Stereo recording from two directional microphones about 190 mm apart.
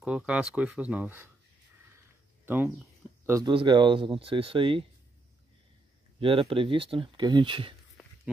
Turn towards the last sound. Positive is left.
turn(degrees=-25)  # may be behind; listen again after turning